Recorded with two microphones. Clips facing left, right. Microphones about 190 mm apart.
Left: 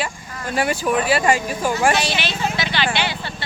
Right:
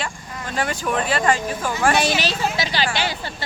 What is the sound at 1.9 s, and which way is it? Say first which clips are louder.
Speech: right 1 dB; 50° right (ahead or behind).